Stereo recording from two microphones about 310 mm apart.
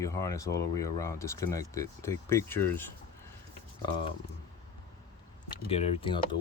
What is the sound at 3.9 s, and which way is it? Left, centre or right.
Speech, centre.